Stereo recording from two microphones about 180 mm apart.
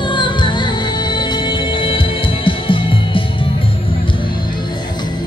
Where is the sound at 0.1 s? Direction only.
25° left (ahead or behind).